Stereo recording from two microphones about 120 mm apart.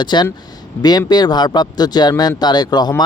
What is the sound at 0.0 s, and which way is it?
Speech, 40° left (ahead or behind).